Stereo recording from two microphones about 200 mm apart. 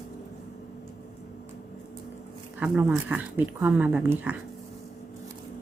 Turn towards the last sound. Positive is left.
turn(degrees=-10)  # may be behind; listen again after turning